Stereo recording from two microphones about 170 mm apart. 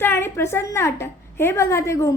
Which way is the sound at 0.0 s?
15° left (ahead or behind).